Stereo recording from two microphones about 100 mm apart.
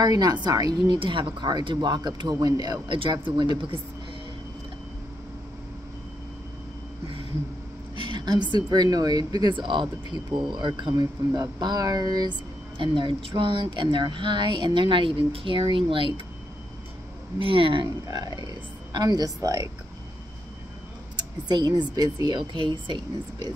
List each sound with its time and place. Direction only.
0.0 s a woman's voice: 40° right (ahead or behind)
0.9 s speech: 55° right (ahead or behind); by 2.8 s 40° right (ahead or behind)
2.9 s speech: 55° right (ahead or behind)
7.9 s a sound: 55° right (ahead or behind)
8.5 s speech: 45° right (ahead or behind); by 16.1 s 60° right (ahead or behind)
17.4 s speech: 60° right (ahead or behind)
17.8 s a woman's voice: 40° right (ahead or behind)
21.2 s speech: 45° right (ahead or behind)